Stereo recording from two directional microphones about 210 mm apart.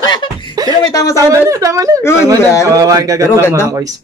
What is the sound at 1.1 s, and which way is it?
Speech, 15° right (ahead or behind).